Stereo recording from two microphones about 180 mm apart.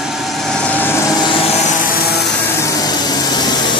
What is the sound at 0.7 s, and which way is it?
Vehicle, 10° left (ahead or behind).